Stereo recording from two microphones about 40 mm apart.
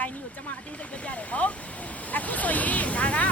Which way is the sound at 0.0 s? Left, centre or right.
Left.